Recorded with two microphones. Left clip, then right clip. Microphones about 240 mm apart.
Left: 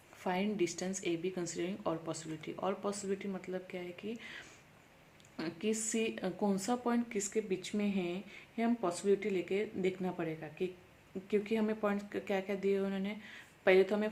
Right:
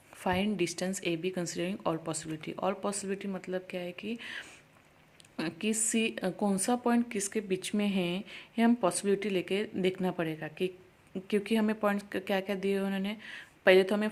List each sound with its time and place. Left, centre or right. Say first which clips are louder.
0.2 s speech: right 4 dB; right